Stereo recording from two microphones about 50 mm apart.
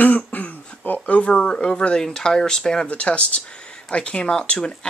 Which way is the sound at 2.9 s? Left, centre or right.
Left.